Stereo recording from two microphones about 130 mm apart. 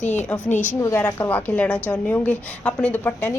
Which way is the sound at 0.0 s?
60° left (ahead or behind).